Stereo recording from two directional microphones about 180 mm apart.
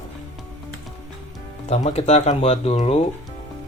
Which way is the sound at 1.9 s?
35° left (ahead or behind).